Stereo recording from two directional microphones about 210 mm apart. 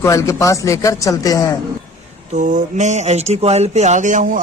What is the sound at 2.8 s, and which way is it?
A man's voice, 35° right (ahead or behind).